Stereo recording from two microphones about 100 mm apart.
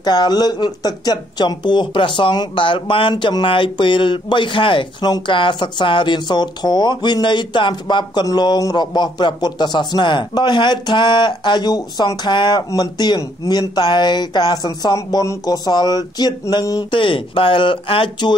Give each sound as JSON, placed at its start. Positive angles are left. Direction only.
{"t": 0.0, "sound": "speech", "side_deg": 45}
{"t": 5.0, "sound": "speech", "side_deg": 50}
{"t": 15.0, "sound": "a sound", "side_deg": 35}
{"t": 16.9, "sound": "speech", "side_deg": 60}